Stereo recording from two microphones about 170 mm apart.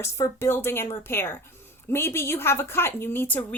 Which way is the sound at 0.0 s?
15° left (ahead or behind).